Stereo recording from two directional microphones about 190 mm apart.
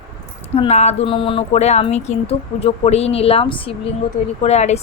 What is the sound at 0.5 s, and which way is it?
Speech, 35° left (ahead or behind).